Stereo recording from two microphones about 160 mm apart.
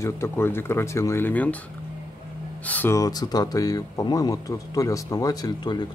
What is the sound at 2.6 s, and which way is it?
Speech, 10° left (ahead or behind).